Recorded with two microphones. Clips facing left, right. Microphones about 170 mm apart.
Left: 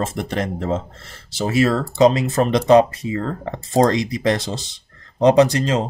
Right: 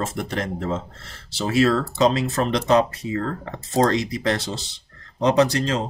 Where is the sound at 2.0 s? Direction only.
15° left (ahead or behind).